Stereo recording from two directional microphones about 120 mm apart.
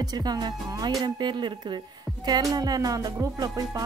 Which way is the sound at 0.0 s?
35° right (ahead or behind).